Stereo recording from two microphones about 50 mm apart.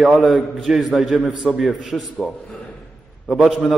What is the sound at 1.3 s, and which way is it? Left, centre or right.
Speech, centre.